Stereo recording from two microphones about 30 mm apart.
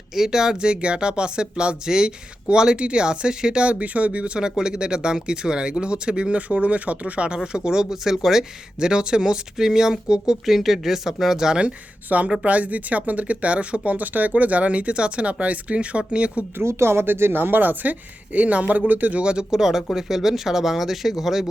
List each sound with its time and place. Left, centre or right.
0.2 s speech: centre
0.7 s speech: right
3.6 s speech: right
4.4 s speech: right
6.5 s speech: right
7.3 s speech: right
8.8 s speech: right
10.4 s speech: centre
12.0 s speech: right
13.9 s speech: right
17.6 s speech: right
18.3 s speech: right
18.9 s speech: right
19.2 s speech: right; by 21.4 s centre